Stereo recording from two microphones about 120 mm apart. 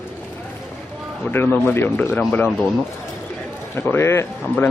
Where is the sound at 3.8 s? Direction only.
20° left (ahead or behind).